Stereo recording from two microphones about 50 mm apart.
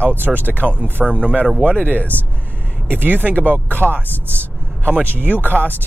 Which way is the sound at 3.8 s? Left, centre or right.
Left.